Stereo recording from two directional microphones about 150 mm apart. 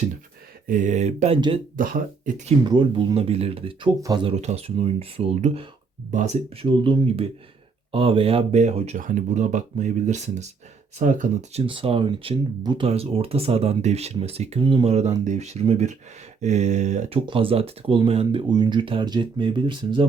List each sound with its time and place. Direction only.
0.7 s speech: 55° right (ahead or behind)
1.4 s speech: 35° right (ahead or behind)
1.7 s speech: 65° right (ahead or behind)
2.6 s speech: 35° right (ahead or behind)
4.3 s speech: 45° right (ahead or behind)
9.0 s speech: 60° right (ahead or behind)
11.6 s speech: 35° right (ahead or behind)